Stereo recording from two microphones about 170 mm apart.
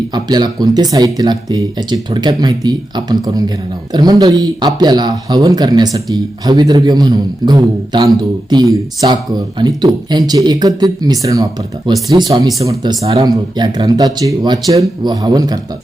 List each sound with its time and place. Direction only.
0.1 s speech: 25° right (ahead or behind)